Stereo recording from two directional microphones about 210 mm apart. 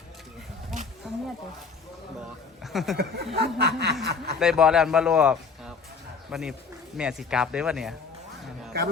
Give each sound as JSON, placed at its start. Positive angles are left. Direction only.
{"t": 1.0, "sound": "a sound", "side_deg": 0}
{"t": 2.7, "sound": "a man's voice", "side_deg": 0}
{"t": 3.3, "sound": "snicker", "side_deg": -50}
{"t": 4.4, "sound": "a man's voice", "side_deg": -5}